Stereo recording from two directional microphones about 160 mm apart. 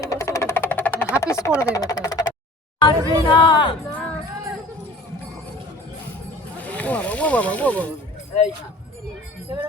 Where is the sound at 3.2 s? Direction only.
30° left (ahead or behind).